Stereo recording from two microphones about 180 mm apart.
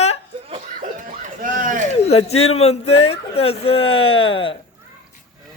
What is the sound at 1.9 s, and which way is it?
Speech, 35° left (ahead or behind).